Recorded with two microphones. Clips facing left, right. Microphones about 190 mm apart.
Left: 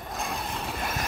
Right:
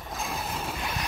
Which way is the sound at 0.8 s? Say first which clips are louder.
Left 2 dB; 45° left (ahead or behind).